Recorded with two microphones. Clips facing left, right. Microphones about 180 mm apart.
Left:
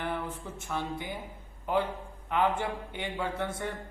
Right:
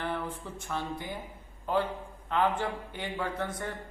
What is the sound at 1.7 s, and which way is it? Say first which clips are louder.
Speech: even; 15° left (ahead or behind).